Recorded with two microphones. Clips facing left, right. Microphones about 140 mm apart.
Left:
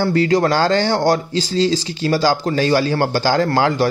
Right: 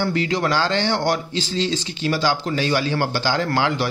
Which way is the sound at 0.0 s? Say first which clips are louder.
Left 6 dB; 40° left (ahead or behind).